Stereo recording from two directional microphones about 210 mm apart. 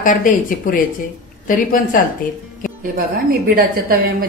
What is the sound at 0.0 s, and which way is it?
Speech, 40° left (ahead or behind).